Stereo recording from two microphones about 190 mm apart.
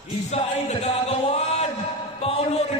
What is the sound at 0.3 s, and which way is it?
Music, 35° left (ahead or behind).